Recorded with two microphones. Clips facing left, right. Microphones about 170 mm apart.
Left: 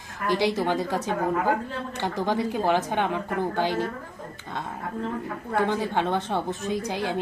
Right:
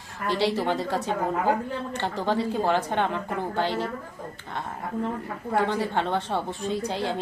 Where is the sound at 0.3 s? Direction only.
15° left (ahead or behind).